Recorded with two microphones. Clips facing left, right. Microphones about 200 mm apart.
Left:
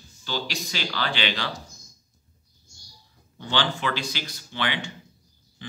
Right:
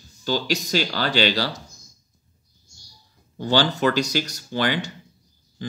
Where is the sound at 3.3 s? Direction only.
40° right (ahead or behind).